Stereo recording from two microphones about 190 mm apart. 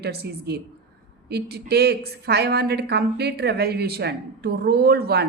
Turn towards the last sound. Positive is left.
turn(degrees=-55)  # may be behind; listen again after turning